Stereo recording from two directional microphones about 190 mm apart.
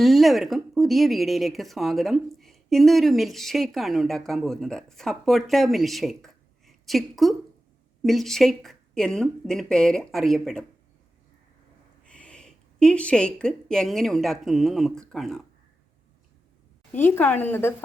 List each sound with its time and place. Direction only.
0.0 s speech: centre (ahead or behind)
12.0 s speech: 5° left (ahead or behind)
16.9 s a woman's voice: 10° left (ahead or behind)